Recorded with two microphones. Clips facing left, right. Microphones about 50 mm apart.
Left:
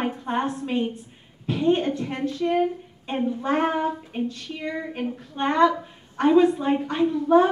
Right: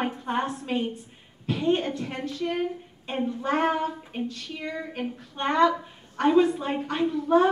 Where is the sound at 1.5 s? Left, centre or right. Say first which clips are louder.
Left 3 dB; centre.